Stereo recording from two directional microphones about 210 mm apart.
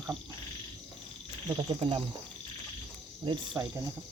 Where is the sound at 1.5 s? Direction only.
25° right (ahead or behind).